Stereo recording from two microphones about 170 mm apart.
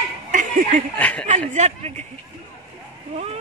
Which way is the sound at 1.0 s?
10° left (ahead or behind).